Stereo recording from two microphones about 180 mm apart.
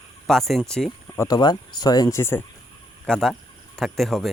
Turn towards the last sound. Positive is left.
turn(degrees=0)  # may be behind; listen again after turning